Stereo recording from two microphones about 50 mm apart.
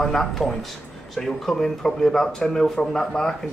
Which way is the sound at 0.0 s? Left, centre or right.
Centre.